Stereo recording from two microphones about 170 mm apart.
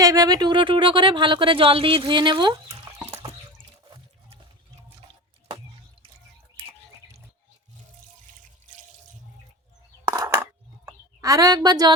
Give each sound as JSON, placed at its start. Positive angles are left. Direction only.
{"t": 0.0, "sound": "speech", "side_deg": -20}
{"t": 10.1, "sound": "coin", "side_deg": -20}
{"t": 10.8, "sound": "speech", "side_deg": -20}